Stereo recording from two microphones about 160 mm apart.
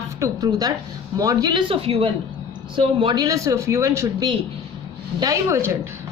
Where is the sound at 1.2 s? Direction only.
20° right (ahead or behind).